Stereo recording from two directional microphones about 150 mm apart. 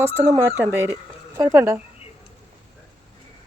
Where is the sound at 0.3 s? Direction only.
15° right (ahead or behind).